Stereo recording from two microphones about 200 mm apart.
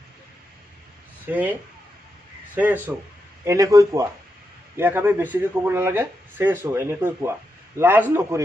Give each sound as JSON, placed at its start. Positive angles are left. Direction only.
{"t": 1.2, "sound": "speech", "side_deg": -10}